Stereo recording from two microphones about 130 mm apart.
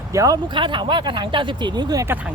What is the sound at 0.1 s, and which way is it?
Speech, 25° right (ahead or behind).